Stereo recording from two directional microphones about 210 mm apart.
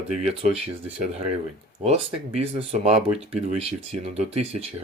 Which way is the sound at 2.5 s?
30° right (ahead or behind).